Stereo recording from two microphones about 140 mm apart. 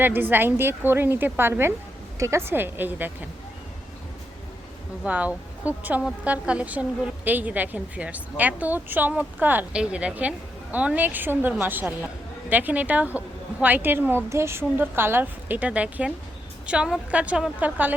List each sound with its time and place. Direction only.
0.0 s a woman's voice: 15° right (ahead or behind)
5.0 s a woman's voice: 10° right (ahead or behind)